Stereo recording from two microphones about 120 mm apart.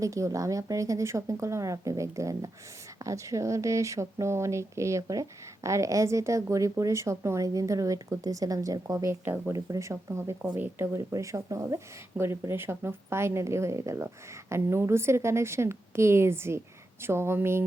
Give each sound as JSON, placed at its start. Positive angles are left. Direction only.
{"t": 0.0, "sound": "a woman's voice", "side_deg": -25}